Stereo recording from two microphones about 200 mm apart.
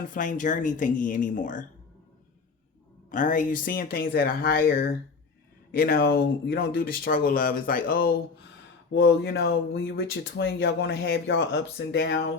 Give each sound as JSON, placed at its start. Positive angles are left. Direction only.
{"t": 0.1, "sound": "speech", "side_deg": 40}
{"t": 3.1, "sound": "speech", "side_deg": 40}
{"t": 8.9, "sound": "speech", "side_deg": 60}
{"t": 11.3, "sound": "speech", "side_deg": 65}